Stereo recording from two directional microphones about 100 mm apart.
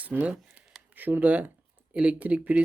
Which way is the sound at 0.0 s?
15° right (ahead or behind).